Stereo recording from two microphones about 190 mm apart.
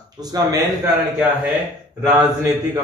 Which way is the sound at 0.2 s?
20° right (ahead or behind).